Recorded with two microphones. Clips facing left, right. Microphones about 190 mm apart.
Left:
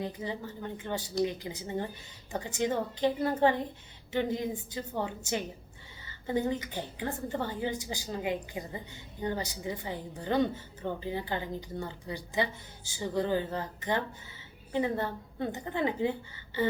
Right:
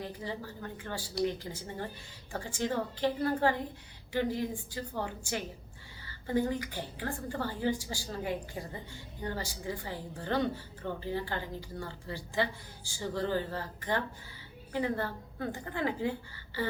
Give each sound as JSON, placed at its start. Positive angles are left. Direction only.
{"t": 0.0, "sound": "a woman's voice", "side_deg": 20}